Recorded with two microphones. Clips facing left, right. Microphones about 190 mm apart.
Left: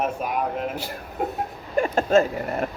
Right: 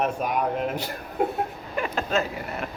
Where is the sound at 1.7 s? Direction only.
45° left (ahead or behind).